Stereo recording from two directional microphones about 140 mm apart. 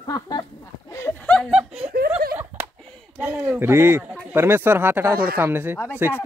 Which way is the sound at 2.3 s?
15° right (ahead or behind).